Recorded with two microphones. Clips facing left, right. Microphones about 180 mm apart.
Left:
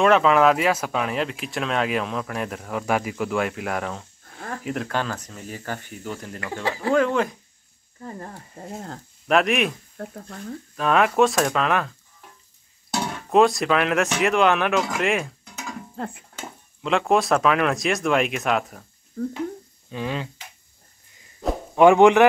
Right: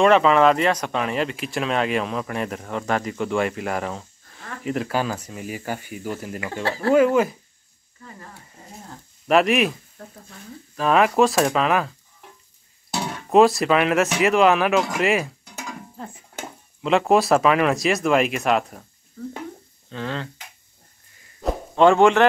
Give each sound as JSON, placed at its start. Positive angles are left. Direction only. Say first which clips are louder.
{"t": 0.0, "sound": "speech", "louder": "right 1 dB", "side_deg": 0}
{"t": 8.0, "sound": "speech", "louder": "left 7 dB", "side_deg": 40}
{"t": 9.3, "sound": "speech", "louder": "right 2 dB", "side_deg": 0}
{"t": 9.9, "sound": "speech", "louder": "left 7 dB", "side_deg": 60}
{"t": 10.8, "sound": "speech", "louder": "right 1 dB", "side_deg": 0}
{"t": 13.3, "sound": "speech", "louder": "right 2 dB", "side_deg": 0}
{"t": 16.0, "sound": "speech", "louder": "left 8 dB", "side_deg": 70}
{"t": 17.1, "sound": "speech", "louder": "right 2 dB", "side_deg": 0}
{"t": 19.9, "sound": "speech", "louder": "left 1 dB", "side_deg": 15}
{"t": 21.4, "sound": "a sound", "louder": "even", "side_deg": 0}
{"t": 21.7, "sound": "speech", "louder": "left 2 dB", "side_deg": 15}